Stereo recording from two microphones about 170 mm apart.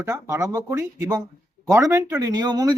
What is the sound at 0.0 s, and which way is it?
A man's voice, 15° right (ahead or behind).